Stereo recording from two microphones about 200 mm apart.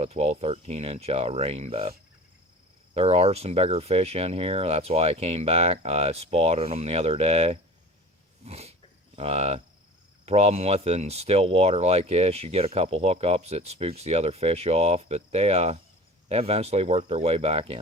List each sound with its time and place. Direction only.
0.0 s speech: 30° right (ahead or behind)
2.9 s speech: 30° right (ahead or behind)